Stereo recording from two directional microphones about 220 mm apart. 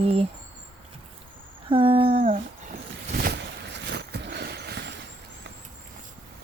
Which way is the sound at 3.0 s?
40° right (ahead or behind).